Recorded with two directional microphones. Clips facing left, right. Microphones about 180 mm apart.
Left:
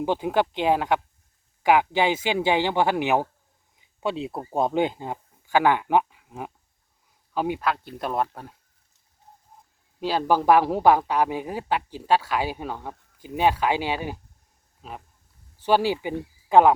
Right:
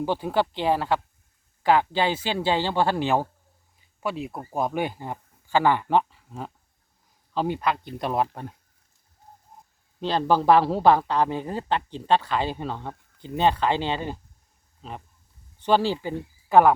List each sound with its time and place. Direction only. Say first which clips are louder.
0.0 s speech: left 1 dB; 15° left (ahead or behind); by 8.5 s centre (ahead or behind)
10.0 s speech: even; 10° left (ahead or behind)